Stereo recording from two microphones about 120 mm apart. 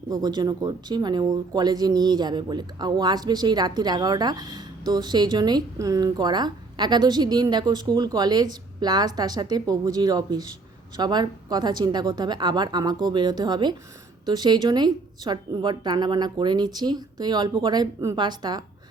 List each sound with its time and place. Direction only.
0.1 s speech: 35° right (ahead or behind)